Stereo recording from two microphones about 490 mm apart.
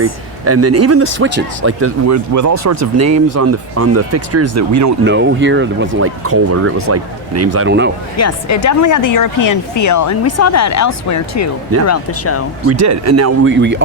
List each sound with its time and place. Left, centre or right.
0.4 s speech: right
5.0 s speech: right
8.1 s speech: left
12.8 s speech: right